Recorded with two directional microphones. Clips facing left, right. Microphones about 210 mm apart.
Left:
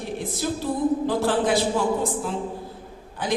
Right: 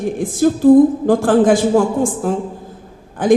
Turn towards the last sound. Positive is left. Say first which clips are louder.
# right 13 dB
turn(degrees=-50)  # may be behind; listen again after turning